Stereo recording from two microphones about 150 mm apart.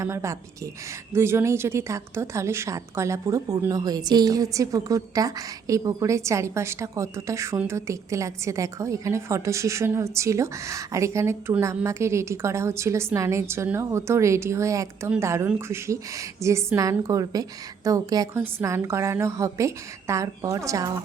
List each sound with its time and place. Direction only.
0.0 s a woman's voice: 20° right (ahead or behind)